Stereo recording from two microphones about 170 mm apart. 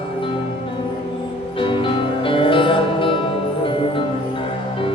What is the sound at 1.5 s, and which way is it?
Music, 30° left (ahead or behind).